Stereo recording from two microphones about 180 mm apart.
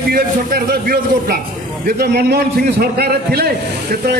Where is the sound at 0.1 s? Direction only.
55° right (ahead or behind).